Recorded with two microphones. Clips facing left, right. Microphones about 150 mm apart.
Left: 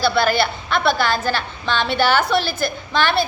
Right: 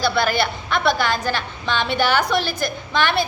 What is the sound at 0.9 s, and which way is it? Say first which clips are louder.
A woman's voice: left 1 dB; 15° right (ahead or behind).